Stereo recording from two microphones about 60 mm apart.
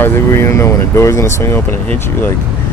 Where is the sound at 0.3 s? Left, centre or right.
Left.